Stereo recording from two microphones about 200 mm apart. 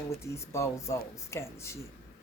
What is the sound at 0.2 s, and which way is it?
A woman's voice, 15° left (ahead or behind).